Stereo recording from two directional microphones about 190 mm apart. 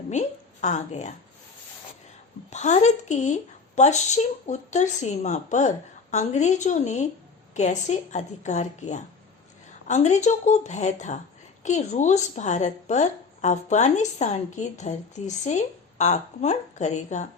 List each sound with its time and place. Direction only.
0.1 s a woman's voice: 40° left (ahead or behind)
2.5 s a woman's voice: 35° left (ahead or behind)